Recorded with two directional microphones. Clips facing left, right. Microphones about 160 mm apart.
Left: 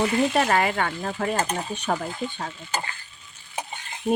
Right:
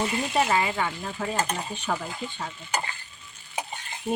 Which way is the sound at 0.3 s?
60° left (ahead or behind).